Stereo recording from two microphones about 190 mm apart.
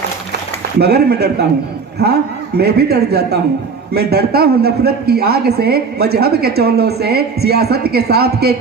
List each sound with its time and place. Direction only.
0.8 s speech: 60° right (ahead or behind)